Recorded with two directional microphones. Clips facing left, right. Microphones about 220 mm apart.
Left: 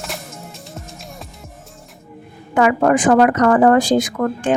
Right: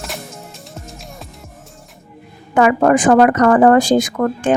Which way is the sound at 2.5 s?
50° right (ahead or behind).